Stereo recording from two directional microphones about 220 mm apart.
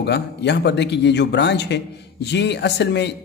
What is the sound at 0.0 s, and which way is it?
A man's voice, 50° left (ahead or behind).